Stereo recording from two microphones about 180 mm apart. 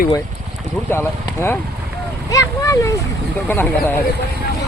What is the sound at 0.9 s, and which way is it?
Speech, 15° left (ahead or behind).